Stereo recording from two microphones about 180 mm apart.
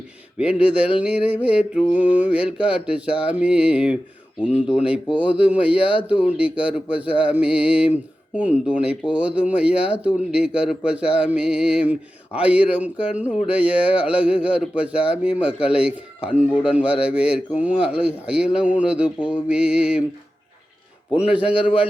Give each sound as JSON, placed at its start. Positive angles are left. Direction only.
{"t": 0.3, "sound": "speech", "side_deg": -5}
{"t": 2.0, "sound": "mantra", "side_deg": 45}
{"t": 2.3, "sound": "a man's voice", "side_deg": -5}
{"t": 21.1, "sound": "speech", "side_deg": -5}